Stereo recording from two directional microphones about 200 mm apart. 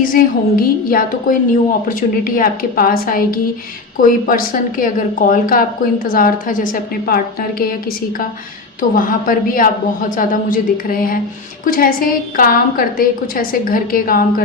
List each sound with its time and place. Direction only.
0.0 s a woman's voice: 45° left (ahead or behind)